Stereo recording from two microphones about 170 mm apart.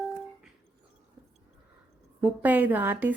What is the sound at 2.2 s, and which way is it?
Speech, 5° right (ahead or behind).